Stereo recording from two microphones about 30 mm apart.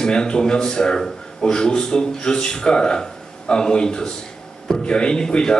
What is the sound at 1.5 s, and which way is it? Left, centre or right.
A man's voice, left.